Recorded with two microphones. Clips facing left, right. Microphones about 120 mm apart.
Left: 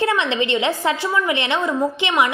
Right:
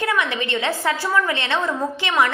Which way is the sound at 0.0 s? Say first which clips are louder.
Left 3 dB; 25° left (ahead or behind).